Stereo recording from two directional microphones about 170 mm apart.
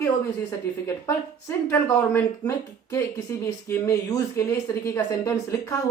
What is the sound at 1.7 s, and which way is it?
Speech, 15° left (ahead or behind).